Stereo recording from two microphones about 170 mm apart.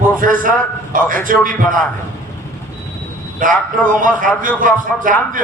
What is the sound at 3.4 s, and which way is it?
A man's voice, 50° right (ahead or behind).